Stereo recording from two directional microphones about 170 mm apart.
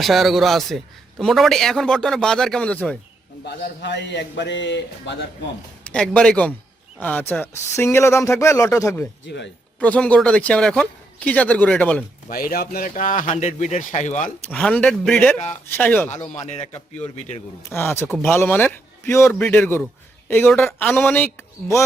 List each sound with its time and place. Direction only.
0.0 s a man's voice: centre (ahead or behind)
3.4 s a man's voice: 85° left
5.9 s a man's voice: 5° left (ahead or behind)
9.2 s a man's voice: 90° left
9.8 s speech: 10° left (ahead or behind)
12.3 s speech: 60° left (ahead or behind)
13.3 s speech: 40° left (ahead or behind)
14.5 s speech: 5° left (ahead or behind)
16.5 s a man's voice: 40° left (ahead or behind)
17.7 s speech: 15° left (ahead or behind)